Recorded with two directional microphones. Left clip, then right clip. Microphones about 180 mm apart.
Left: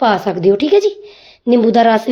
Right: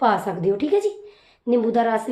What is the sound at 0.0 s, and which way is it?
A woman's voice, 40° left (ahead or behind).